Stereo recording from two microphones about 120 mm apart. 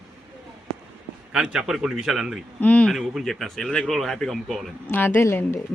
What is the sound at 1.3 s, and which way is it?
Speech, 5° right (ahead or behind).